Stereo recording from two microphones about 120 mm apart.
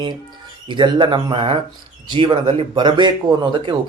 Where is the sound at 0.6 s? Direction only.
40° right (ahead or behind).